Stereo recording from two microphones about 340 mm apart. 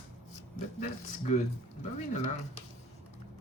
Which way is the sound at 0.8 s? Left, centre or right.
Left.